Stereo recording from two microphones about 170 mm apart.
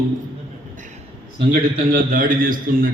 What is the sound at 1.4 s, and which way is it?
Speech, 55° right (ahead or behind).